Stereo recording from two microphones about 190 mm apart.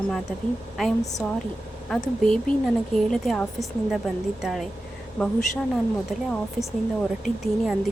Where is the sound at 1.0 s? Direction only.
20° left (ahead or behind).